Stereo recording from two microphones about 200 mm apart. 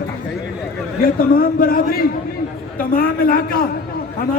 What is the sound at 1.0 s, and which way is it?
A man's voice, 45° left (ahead or behind).